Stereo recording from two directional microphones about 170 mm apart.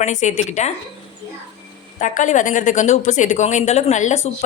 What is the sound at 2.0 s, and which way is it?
Speech, 45° left (ahead or behind).